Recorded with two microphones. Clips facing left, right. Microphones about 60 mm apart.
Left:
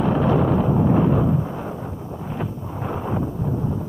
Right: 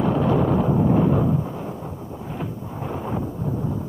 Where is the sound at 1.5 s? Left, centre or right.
Centre.